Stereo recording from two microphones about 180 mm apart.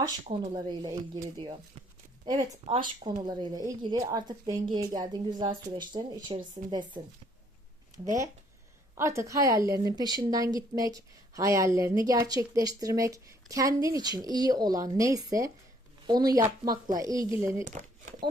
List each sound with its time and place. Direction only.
0.5 s a woman's voice: 25° right (ahead or behind)
9.0 s a woman's voice: 15° right (ahead or behind)
17.6 s a sound: 45° right (ahead or behind)